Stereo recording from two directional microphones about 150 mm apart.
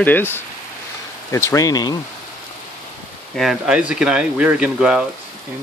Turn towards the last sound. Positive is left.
turn(degrees=-5)  # may be behind; listen again after turning